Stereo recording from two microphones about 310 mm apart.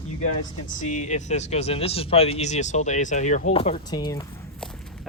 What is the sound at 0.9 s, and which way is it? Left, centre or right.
Speech, left.